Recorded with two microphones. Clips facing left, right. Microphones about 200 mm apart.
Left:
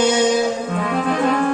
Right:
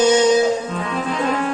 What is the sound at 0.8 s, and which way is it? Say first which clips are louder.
Music: left 3 dB; 55° left (ahead or behind).